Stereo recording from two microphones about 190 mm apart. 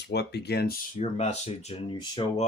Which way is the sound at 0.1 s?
60° left (ahead or behind).